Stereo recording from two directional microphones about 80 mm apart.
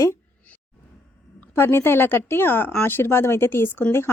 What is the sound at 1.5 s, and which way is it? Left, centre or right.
A woman's voice, left.